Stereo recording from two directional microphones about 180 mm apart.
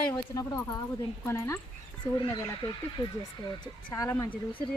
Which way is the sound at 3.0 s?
25° left (ahead or behind).